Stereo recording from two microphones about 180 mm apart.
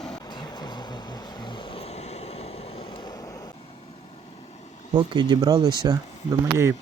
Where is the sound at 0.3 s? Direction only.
25° left (ahead or behind).